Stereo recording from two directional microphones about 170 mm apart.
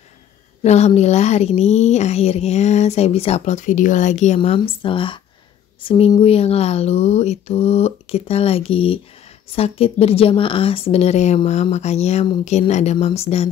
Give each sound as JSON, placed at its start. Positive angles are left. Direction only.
{"t": 0.6, "sound": "speech", "side_deg": 40}